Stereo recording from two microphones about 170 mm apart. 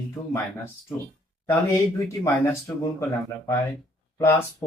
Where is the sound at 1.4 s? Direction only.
15° left (ahead or behind).